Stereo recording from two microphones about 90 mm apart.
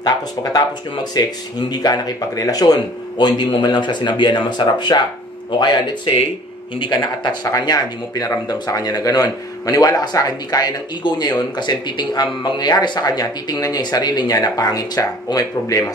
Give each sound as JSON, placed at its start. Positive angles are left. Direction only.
{"t": 0.0, "sound": "speech", "side_deg": 45}